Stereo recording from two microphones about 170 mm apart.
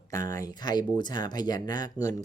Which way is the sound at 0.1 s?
20° left (ahead or behind).